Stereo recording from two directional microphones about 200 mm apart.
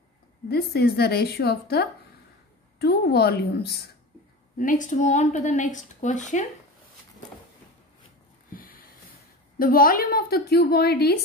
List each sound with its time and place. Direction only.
0.5 s a woman's voice: 50° left (ahead or behind)
4.6 s speech: 40° left (ahead or behind)
8.5 s a sound: 45° left (ahead or behind)
9.6 s a woman's voice: 45° left (ahead or behind)